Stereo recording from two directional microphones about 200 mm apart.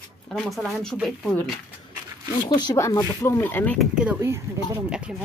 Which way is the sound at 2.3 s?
20° left (ahead or behind).